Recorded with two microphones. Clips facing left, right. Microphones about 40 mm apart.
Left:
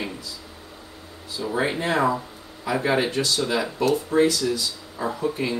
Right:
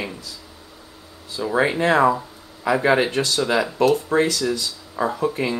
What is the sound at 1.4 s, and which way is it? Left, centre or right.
Speech, right.